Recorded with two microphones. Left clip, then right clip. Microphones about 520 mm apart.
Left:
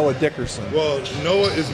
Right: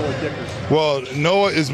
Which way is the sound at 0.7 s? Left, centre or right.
Right.